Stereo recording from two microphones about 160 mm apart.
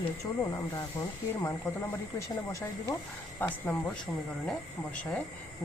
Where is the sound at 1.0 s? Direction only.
20° left (ahead or behind).